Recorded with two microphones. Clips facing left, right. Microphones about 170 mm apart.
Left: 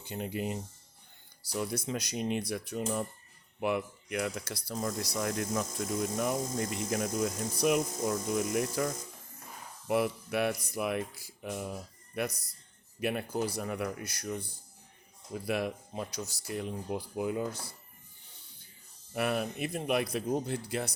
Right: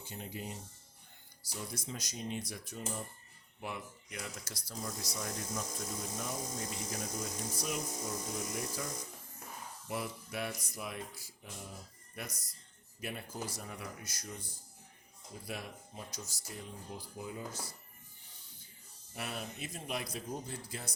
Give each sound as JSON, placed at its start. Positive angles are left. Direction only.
{"t": 0.0, "sound": "speech", "side_deg": 65}
{"t": 6.1, "sound": "speech", "side_deg": 60}
{"t": 9.8, "sound": "speech", "side_deg": 70}
{"t": 19.1, "sound": "speech", "side_deg": 65}